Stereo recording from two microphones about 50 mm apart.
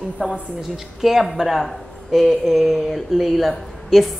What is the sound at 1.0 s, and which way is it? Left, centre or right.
Speech, centre.